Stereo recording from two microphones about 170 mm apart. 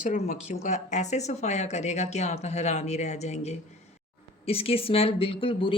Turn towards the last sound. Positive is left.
turn(degrees=30)  # may be behind; listen again after turning